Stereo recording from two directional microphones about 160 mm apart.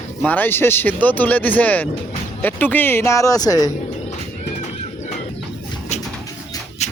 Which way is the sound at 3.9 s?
45° left (ahead or behind).